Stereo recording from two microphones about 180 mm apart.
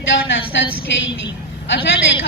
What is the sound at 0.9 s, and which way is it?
Speech, 75° left (ahead or behind).